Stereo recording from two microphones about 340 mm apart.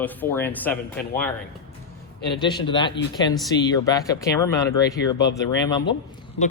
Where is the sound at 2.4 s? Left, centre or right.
Centre.